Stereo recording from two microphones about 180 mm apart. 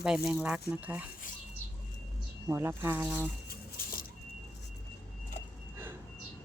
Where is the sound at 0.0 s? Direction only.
5° right (ahead or behind).